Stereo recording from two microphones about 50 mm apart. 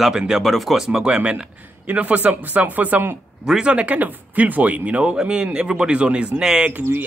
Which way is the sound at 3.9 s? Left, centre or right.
Right.